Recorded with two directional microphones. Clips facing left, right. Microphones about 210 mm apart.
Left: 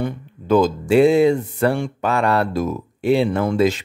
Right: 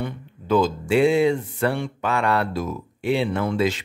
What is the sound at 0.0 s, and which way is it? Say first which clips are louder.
Speech: left 5 dB; 45° left (ahead or behind).